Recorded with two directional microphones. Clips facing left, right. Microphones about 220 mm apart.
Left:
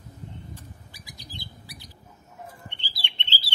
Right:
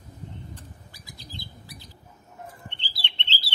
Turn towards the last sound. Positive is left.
turn(degrees=10)  # may be behind; listen again after turning